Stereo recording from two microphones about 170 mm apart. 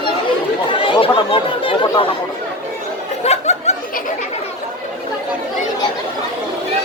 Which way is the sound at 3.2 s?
40° left (ahead or behind).